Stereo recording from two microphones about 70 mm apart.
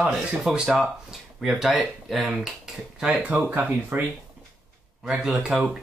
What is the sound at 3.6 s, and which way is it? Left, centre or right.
Speech, right.